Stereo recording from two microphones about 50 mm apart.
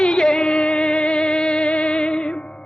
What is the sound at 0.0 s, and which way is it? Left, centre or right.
Music, centre.